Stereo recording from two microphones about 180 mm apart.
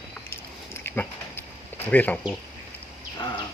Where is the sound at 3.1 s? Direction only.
25° left (ahead or behind).